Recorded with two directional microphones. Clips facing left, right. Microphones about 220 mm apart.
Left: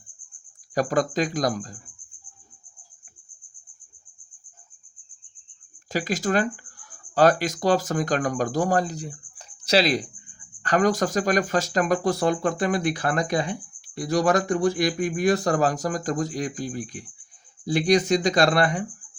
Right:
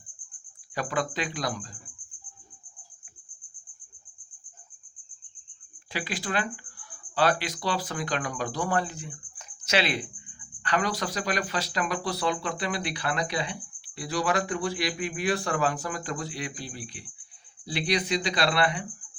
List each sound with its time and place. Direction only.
0.7 s speech: 40° left (ahead or behind)
5.9 s speech: 45° left (ahead or behind)